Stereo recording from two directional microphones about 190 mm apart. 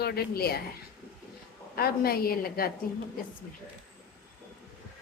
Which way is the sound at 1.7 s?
55° left (ahead or behind).